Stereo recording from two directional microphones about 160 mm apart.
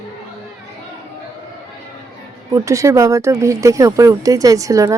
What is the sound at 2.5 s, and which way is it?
A woman's voice, 20° right (ahead or behind).